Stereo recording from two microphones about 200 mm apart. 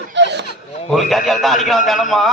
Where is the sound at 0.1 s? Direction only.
60° right (ahead or behind).